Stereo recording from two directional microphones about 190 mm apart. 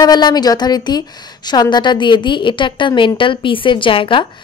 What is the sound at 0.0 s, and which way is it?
A woman's voice, 20° left (ahead or behind).